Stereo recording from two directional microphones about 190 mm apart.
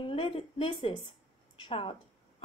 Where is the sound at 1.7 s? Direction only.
30° left (ahead or behind).